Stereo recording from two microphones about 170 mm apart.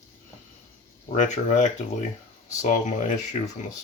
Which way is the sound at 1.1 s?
45° left (ahead or behind).